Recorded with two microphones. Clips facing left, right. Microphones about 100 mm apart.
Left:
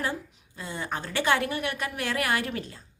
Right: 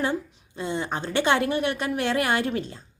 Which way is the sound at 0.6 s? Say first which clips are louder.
Right 5 dB; 25° right (ahead or behind).